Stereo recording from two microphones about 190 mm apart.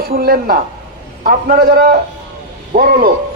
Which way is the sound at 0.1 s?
55° right (ahead or behind).